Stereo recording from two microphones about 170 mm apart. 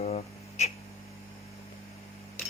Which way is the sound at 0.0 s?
40° left (ahead or behind).